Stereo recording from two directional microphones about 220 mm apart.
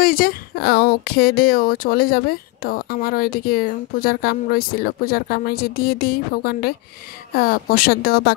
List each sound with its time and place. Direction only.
0.0 s speech: 40° left (ahead or behind)